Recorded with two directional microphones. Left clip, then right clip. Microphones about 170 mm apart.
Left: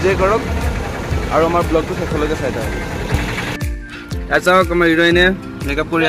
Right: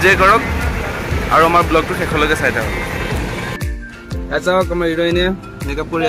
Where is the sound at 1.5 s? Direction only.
5° left (ahead or behind).